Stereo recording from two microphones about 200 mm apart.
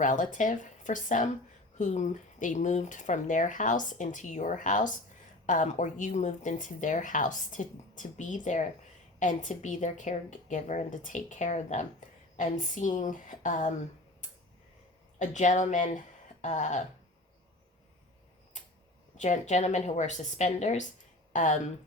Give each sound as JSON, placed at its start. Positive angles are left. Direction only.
{"t": 0.0, "sound": "a woman's voice", "side_deg": 40}
{"t": 15.2, "sound": "speech", "side_deg": 35}
{"t": 19.1, "sound": "a woman's voice", "side_deg": 35}